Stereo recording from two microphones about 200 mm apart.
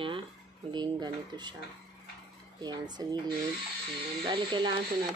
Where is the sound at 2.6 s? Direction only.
20° right (ahead or behind).